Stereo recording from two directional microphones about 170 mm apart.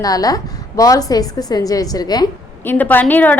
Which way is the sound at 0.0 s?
20° left (ahead or behind).